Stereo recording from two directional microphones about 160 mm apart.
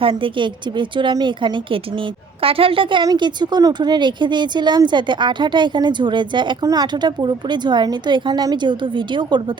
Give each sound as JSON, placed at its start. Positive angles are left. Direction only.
{"t": 0.0, "sound": "a woman's voice", "side_deg": -35}